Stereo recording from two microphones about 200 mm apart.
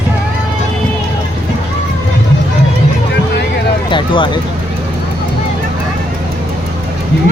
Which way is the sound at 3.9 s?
25° left (ahead or behind).